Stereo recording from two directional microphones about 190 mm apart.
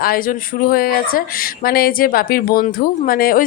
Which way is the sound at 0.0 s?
50° left (ahead or behind).